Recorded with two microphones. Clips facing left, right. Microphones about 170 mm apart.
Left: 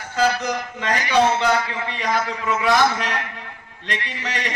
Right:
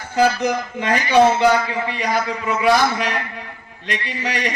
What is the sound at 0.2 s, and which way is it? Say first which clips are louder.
A man's voice: right 4 dB; 15° right (ahead or behind).